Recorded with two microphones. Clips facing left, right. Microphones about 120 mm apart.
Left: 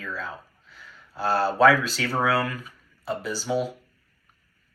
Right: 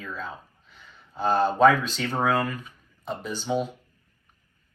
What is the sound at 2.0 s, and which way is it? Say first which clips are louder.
Speech: even; 20° right (ahead or behind).